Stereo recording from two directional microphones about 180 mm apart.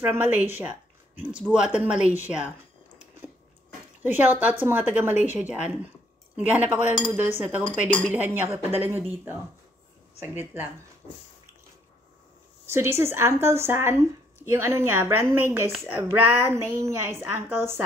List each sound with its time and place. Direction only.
0.0 s a woman's voice: 10° right (ahead or behind)
4.0 s speech: 10° right (ahead or behind)
12.6 s speech: 15° right (ahead or behind)